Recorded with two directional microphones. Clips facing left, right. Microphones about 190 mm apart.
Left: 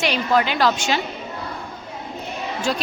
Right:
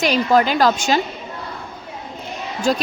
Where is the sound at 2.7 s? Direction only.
45° right (ahead or behind).